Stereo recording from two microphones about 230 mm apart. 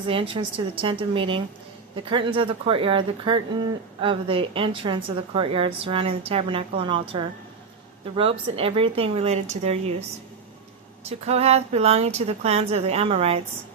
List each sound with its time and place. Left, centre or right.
0.0 s a woman's voice: right
11.3 s a woman's voice: right